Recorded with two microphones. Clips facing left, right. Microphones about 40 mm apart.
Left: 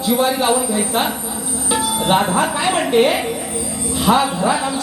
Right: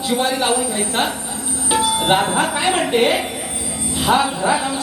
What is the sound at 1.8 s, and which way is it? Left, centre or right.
Music, right.